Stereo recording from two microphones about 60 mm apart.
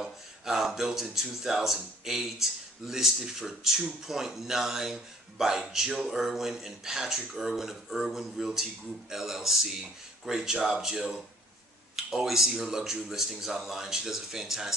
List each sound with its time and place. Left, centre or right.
0.0 s speech: centre